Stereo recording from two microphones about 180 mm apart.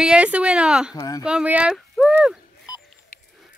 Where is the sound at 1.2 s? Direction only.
5° right (ahead or behind).